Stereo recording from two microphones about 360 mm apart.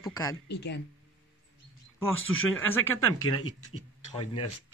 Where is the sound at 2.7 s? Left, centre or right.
Centre.